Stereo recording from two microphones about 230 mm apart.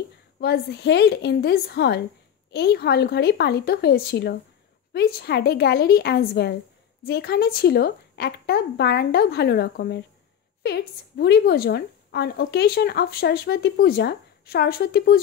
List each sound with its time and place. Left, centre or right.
0.4 s a woman's voice: left